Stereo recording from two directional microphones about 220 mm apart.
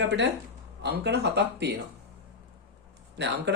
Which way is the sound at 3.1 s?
50° right (ahead or behind).